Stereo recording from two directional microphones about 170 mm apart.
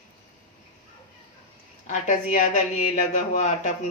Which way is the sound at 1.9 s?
45° left (ahead or behind).